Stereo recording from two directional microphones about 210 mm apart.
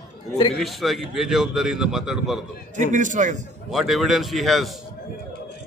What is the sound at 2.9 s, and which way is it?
Speech, 35° right (ahead or behind).